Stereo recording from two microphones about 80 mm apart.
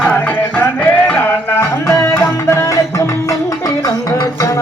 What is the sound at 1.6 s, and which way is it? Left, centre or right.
Music, left.